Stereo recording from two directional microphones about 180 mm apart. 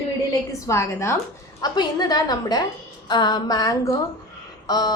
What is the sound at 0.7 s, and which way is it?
A woman's voice, 15° left (ahead or behind).